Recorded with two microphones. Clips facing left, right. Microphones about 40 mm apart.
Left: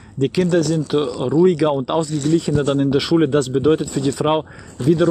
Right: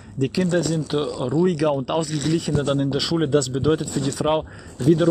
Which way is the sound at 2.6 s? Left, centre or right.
Left.